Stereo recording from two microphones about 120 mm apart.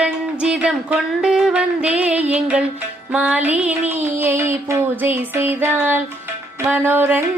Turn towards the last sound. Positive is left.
turn(degrees=-15)  # may be behind; listen again after turning